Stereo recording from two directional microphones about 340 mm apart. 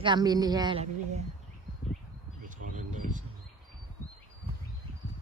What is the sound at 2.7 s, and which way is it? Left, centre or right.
Speech, right.